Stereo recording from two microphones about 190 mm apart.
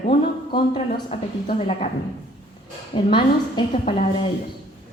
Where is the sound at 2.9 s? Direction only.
25° left (ahead or behind).